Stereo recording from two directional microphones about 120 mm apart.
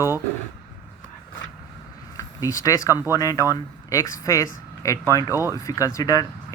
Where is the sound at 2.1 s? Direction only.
30° left (ahead or behind).